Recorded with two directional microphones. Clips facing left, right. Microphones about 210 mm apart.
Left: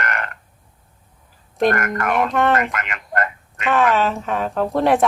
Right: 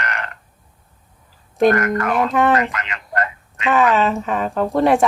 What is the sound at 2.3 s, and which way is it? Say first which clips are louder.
Speech: right 3 dB; centre (ahead or behind).